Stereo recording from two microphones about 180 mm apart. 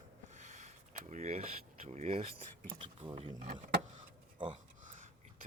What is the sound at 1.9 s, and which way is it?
Speech, 35° right (ahead or behind).